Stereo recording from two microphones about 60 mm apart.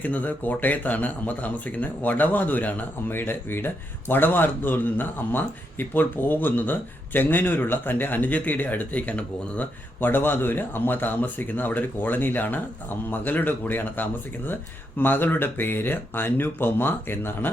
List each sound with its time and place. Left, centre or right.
0.0 s speech: left